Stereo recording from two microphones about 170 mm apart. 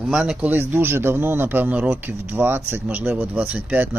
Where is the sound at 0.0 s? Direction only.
5° right (ahead or behind).